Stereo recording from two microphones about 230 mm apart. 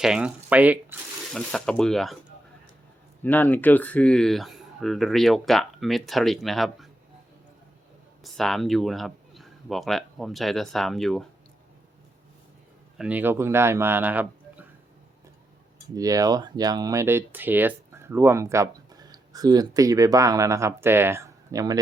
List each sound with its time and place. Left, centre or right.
0.0 s speech: centre
3.2 s speech: centre
8.2 s speech: centre
13.0 s speech: centre
16.0 s speech: centre